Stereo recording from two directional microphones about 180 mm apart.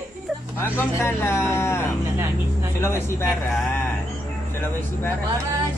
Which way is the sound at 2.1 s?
15° right (ahead or behind).